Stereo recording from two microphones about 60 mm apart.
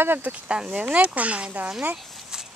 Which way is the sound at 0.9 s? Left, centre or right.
Right.